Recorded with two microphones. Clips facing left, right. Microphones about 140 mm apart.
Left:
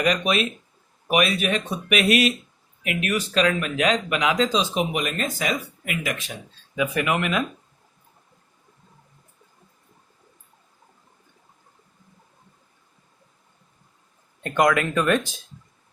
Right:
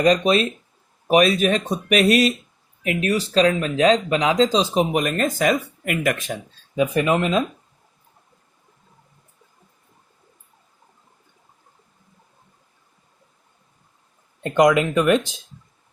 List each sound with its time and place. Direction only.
0.0 s speech: 35° right (ahead or behind); by 6.3 s 50° right (ahead or behind)
6.7 s speech: 30° right (ahead or behind)
14.4 s speech: 20° right (ahead or behind)